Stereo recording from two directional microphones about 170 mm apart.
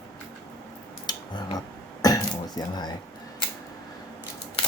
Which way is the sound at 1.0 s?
25° left (ahead or behind).